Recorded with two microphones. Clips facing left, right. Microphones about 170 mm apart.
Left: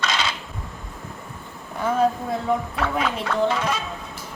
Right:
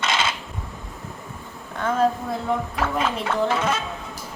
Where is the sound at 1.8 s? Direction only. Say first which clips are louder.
Even; 5° left (ahead or behind).